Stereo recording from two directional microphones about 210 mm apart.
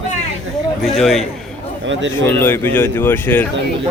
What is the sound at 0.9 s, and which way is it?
Speech, centre (ahead or behind).